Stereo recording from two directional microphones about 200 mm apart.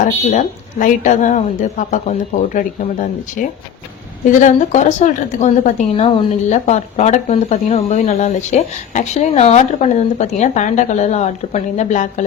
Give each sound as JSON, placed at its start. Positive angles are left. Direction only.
{"t": 0.3, "sound": "speech", "side_deg": 40}